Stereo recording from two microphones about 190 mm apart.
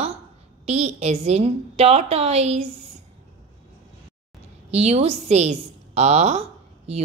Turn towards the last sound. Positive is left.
turn(degrees=-35)  # may be behind; listen again after turning